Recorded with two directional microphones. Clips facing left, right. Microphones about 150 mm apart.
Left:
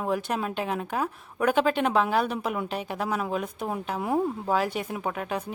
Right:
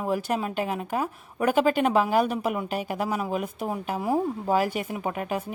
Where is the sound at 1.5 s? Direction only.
5° right (ahead or behind).